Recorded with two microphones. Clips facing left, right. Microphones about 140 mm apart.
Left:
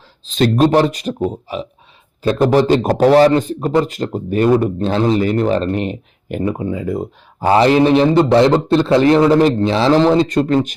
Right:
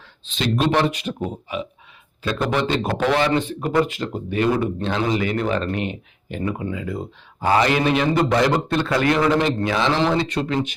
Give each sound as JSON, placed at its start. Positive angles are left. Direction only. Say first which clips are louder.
{"t": 0.3, "sound": "speech", "louder": "left 8 dB", "side_deg": 45}
{"t": 4.9, "sound": "speech", "louder": "left 8 dB", "side_deg": 35}
{"t": 7.4, "sound": "speech", "louder": "left 7 dB", "side_deg": 30}